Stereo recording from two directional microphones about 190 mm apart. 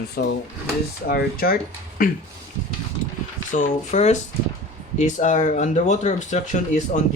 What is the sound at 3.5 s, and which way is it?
Speech, 40° left (ahead or behind).